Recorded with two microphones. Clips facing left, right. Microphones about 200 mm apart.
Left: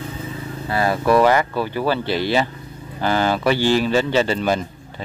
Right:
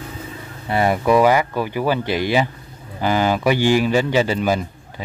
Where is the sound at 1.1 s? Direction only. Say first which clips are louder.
Even; 10° right (ahead or behind).